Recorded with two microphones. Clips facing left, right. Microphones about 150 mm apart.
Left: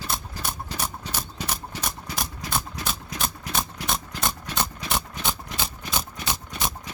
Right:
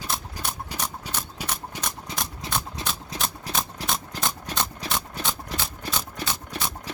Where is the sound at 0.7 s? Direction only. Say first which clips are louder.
Left 1 dB; 10° right (ahead or behind).